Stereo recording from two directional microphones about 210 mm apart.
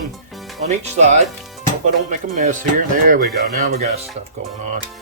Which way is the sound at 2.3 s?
35° right (ahead or behind).